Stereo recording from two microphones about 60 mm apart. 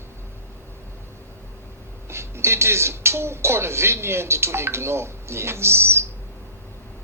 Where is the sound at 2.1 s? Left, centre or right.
Right.